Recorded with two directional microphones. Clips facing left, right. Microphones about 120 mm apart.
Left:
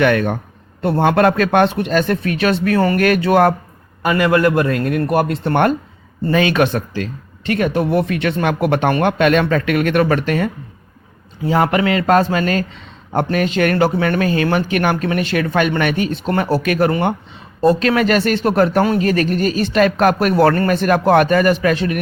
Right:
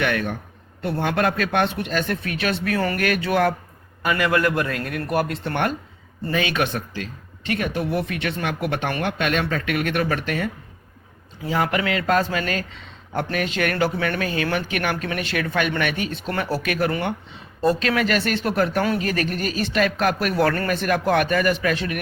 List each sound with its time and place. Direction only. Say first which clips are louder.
0.0 s speech: left 8 dB; 50° left (ahead or behind)
1.4 s speech: left 8 dB; 45° left (ahead or behind)
9.1 s speech: left 9 dB; 60° left (ahead or behind)
11.5 s speech: left 7 dB; 35° left (ahead or behind)
16.1 s speech: left 8 dB; 25° left (ahead or behind)